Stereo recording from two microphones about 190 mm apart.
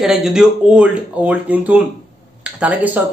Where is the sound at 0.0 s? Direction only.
5° right (ahead or behind).